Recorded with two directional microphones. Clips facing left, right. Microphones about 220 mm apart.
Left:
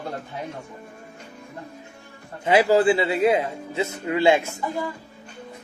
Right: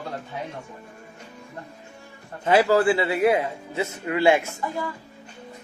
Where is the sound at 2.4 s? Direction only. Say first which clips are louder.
Left 1 dB; 20° left (ahead or behind).